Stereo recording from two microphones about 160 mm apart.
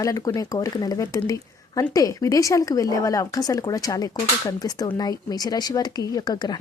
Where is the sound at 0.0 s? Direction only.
20° left (ahead or behind).